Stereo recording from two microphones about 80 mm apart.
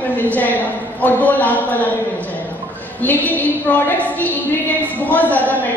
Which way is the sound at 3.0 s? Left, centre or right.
Left.